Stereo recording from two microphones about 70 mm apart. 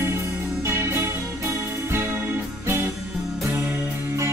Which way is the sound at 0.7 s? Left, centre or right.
Right.